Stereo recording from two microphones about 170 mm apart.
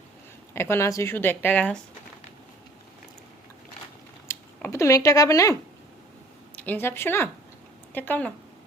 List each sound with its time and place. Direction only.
0.5 s speech: 15° left (ahead or behind)
4.3 s speech: 15° left (ahead or behind)
6.6 s speech: 10° left (ahead or behind)